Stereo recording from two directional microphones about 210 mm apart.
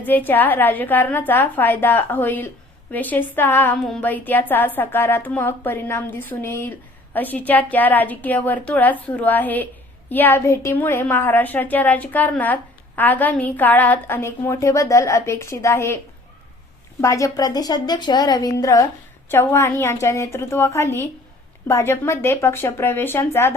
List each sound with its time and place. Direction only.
0.0 s a woman's voice: 10° left (ahead or behind)
17.0 s a woman's voice: 15° left (ahead or behind)